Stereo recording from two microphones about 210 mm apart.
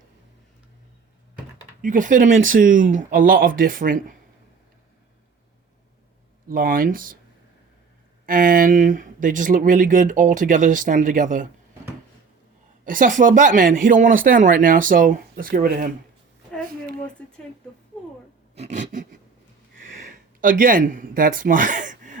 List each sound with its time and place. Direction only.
1.8 s speech: 40° right (ahead or behind)
6.5 s speech: 40° right (ahead or behind)
8.3 s speech: 40° right (ahead or behind)
12.8 s speech: 40° right (ahead or behind)
17.2 s a sound: 5° left (ahead or behind)
18.5 s speech: 35° right (ahead or behind)